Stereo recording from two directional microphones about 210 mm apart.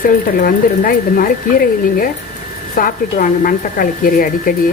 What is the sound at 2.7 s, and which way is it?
A woman's voice, 40° left (ahead or behind).